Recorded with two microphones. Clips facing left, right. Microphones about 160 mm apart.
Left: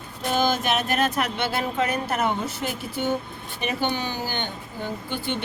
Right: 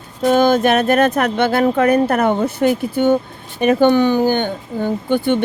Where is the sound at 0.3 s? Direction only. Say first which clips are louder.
Right 10 dB; 55° right (ahead or behind).